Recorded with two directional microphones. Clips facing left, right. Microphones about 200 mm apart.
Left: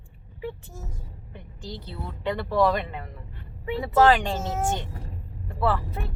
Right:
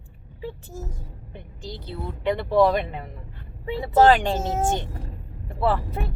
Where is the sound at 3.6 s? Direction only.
30° right (ahead or behind).